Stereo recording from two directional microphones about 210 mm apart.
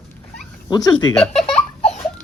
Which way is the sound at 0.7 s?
20° left (ahead or behind).